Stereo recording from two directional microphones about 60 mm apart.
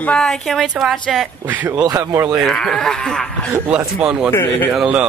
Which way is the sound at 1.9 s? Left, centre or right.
Right.